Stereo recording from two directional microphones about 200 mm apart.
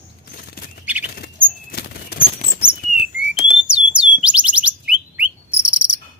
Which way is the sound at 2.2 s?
35° left (ahead or behind).